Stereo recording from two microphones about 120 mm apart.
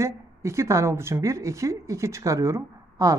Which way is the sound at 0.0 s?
25° right (ahead or behind).